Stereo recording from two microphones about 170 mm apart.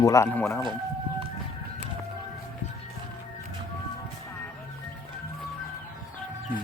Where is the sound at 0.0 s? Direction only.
20° left (ahead or behind).